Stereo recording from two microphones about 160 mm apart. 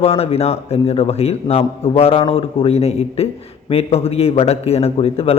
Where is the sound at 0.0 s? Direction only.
40° left (ahead or behind).